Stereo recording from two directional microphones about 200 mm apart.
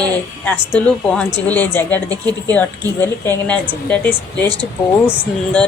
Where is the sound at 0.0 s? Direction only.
10° left (ahead or behind).